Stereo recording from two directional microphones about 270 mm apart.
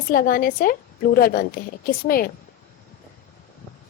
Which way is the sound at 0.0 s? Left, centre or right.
Left.